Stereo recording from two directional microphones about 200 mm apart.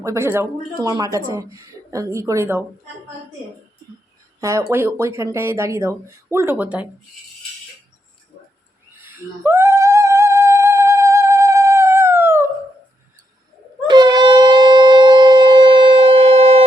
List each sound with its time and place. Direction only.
0.0 s speech: 15° right (ahead or behind)
4.4 s speech: 15° right (ahead or behind)
9.0 s singing: 10° right (ahead or behind)
13.8 s shofar: 20° right (ahead or behind)